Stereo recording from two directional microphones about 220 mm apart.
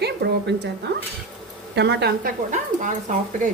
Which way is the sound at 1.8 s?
50° right (ahead or behind).